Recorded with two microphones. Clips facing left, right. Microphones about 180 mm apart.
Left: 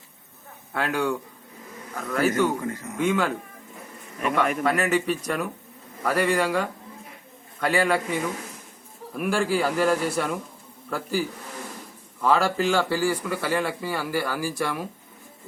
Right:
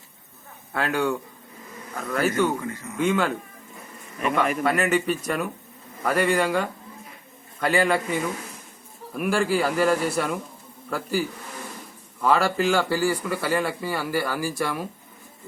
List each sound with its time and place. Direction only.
0.7 s a man's voice: centre (ahead or behind)
2.3 s speech: 40° left (ahead or behind)
3.0 s a man's voice: centre (ahead or behind)
12.2 s speech: centre (ahead or behind)